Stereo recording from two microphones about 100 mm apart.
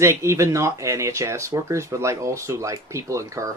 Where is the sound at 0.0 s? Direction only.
30° right (ahead or behind).